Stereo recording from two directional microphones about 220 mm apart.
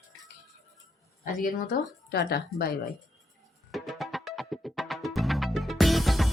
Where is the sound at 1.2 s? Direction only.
40° left (ahead or behind).